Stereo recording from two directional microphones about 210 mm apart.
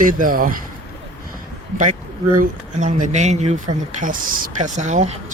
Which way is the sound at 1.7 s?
35° right (ahead or behind).